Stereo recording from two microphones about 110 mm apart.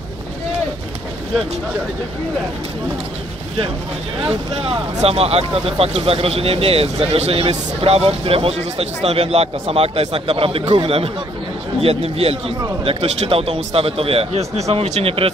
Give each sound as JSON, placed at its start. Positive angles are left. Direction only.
{"t": 4.2, "sound": "speech", "side_deg": -55}